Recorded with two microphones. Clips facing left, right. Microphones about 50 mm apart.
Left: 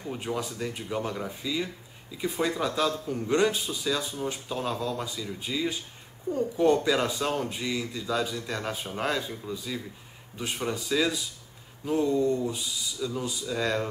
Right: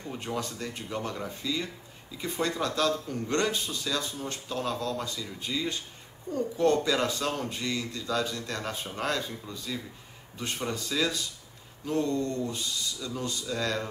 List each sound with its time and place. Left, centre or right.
0.0 s speech: centre